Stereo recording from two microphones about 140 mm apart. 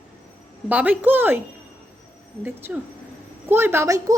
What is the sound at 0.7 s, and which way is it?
Speech, 10° right (ahead or behind).